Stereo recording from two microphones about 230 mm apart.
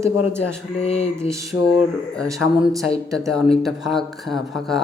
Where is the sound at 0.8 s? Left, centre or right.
Left.